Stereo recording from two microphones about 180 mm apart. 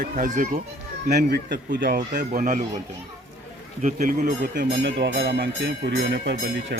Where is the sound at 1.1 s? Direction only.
60° right (ahead or behind).